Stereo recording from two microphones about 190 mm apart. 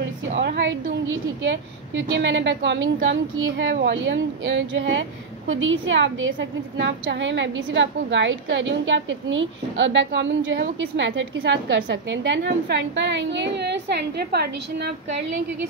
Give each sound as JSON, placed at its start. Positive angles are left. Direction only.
{"t": 0.4, "sound": "a woman's voice", "side_deg": -70}
{"t": 1.0, "sound": "a woman's voice", "side_deg": -80}
{"t": 6.8, "sound": "a woman's voice", "side_deg": -70}